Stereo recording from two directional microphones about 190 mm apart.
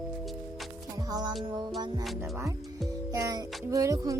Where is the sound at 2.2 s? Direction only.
15° right (ahead or behind).